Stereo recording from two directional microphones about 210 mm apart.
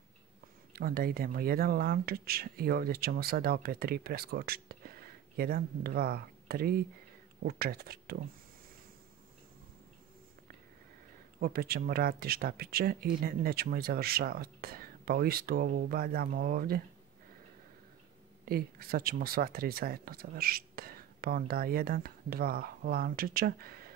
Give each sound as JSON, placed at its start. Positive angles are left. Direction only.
{"t": 0.7, "sound": "speech", "side_deg": -45}
{"t": 11.3, "sound": "speech", "side_deg": -45}
{"t": 18.4, "sound": "speech", "side_deg": -45}